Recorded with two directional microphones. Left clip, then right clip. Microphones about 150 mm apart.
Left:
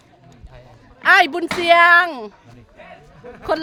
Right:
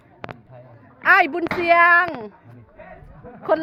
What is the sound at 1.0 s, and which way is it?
Speech, 20° left (ahead or behind).